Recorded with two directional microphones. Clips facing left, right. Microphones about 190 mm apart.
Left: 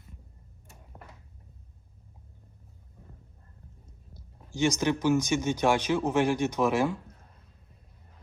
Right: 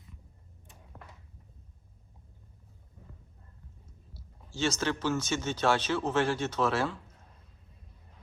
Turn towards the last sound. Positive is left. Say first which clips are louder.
# left 4 dB
turn(degrees=15)  # may be behind; listen again after turning